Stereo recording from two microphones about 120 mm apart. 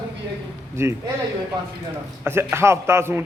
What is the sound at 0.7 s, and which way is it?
Speech, 20° right (ahead or behind).